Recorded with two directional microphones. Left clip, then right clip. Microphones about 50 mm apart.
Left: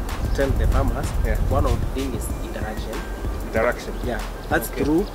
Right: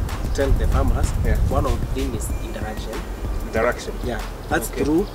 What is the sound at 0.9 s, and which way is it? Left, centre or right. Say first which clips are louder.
Speech: even; right.